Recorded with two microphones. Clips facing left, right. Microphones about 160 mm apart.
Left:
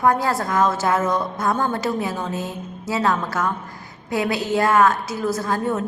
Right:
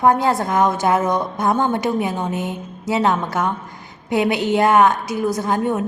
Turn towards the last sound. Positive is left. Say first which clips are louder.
# right 3 dB
turn(degrees=-20)  # may be behind; listen again after turning